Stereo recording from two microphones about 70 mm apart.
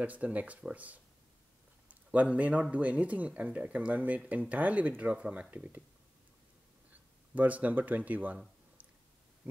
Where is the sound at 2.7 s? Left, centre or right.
Centre.